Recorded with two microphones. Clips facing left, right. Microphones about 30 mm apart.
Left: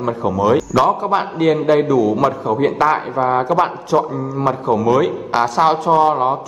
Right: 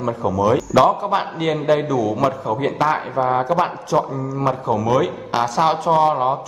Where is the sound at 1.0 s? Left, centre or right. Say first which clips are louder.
Left 4 dB; centre.